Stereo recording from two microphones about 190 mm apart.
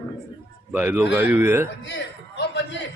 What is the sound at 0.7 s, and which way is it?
Speech, 10° right (ahead or behind).